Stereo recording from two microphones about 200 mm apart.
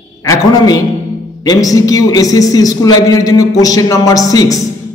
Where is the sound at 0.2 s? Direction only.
15° left (ahead or behind).